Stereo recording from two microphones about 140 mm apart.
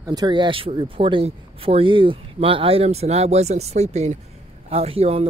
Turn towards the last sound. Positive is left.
turn(degrees=-45)  # may be behind; listen again after turning